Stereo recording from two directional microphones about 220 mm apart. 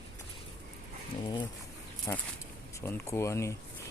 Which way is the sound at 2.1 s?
15° left (ahead or behind).